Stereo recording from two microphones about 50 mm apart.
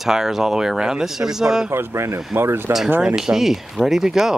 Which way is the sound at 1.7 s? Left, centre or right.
Right.